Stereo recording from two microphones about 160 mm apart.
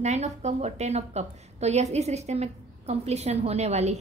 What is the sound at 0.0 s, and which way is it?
A woman's voice, 45° right (ahead or behind).